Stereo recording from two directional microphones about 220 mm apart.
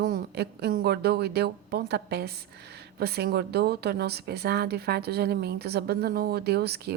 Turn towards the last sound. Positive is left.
turn(degrees=-45)  # may be behind; listen again after turning